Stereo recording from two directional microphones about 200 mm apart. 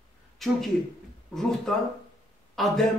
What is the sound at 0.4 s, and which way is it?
Speech, centre (ahead or behind).